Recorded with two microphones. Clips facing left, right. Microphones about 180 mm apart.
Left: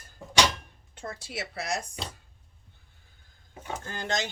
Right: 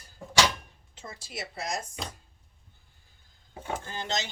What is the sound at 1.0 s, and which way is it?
Speech, 60° left (ahead or behind).